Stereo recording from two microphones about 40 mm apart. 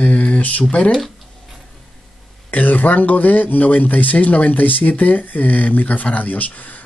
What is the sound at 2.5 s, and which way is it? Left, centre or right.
Speech, left.